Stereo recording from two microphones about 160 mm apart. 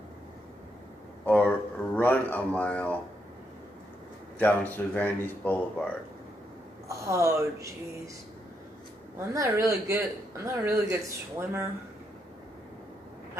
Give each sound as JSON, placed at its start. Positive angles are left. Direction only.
{"t": 1.2, "sound": "a sound", "side_deg": 10}
{"t": 4.4, "sound": "speech", "side_deg": 10}
{"t": 6.9, "sound": "speech", "side_deg": -20}
{"t": 9.3, "sound": "speech", "side_deg": -20}